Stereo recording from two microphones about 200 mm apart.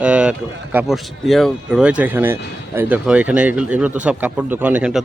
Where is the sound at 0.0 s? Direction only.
5° right (ahead or behind).